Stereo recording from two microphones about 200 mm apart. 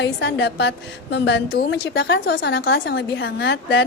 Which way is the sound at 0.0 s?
60° left (ahead or behind).